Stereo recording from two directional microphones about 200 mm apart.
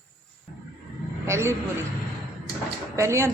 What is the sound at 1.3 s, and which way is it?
Speech, 15° right (ahead or behind).